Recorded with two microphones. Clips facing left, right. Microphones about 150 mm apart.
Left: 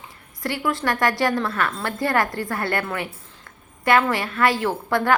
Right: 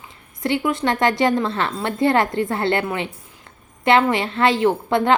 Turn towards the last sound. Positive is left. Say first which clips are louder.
# right 4 dB
turn(degrees=-20)  # may be behind; listen again after turning